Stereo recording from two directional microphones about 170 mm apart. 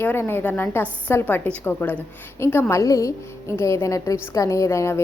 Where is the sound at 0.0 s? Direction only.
15° left (ahead or behind).